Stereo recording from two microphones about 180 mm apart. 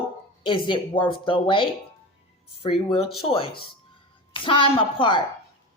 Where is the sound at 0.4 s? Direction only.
30° left (ahead or behind).